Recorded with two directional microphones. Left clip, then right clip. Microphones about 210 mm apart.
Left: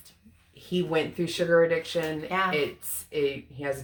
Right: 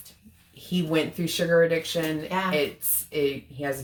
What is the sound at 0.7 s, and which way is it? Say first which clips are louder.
Speech: right 1 dB; 10° right (ahead or behind).